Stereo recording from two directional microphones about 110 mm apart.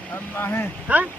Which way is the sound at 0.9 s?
15° right (ahead or behind).